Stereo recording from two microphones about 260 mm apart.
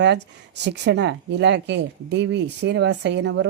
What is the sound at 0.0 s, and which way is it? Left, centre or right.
Speech, right.